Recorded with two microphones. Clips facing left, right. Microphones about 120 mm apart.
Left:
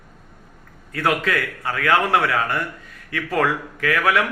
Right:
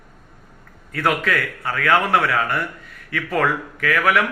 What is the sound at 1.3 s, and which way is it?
A man's voice, 20° left (ahead or behind).